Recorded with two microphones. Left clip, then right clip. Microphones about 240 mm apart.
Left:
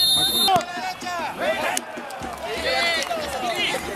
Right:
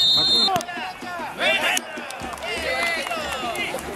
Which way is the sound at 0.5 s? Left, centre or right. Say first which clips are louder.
Left 3 dB; centre.